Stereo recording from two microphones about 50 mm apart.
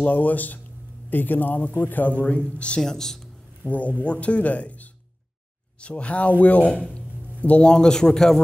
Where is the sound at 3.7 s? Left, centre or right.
Left; by 8.4 s centre.